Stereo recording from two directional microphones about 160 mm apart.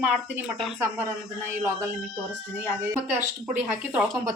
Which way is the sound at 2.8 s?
15° right (ahead or behind).